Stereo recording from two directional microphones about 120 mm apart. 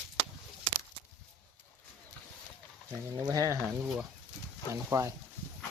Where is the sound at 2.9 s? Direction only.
30° right (ahead or behind).